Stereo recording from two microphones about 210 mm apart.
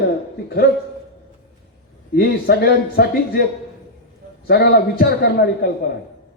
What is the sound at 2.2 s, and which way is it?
A man's voice, 50° left (ahead or behind).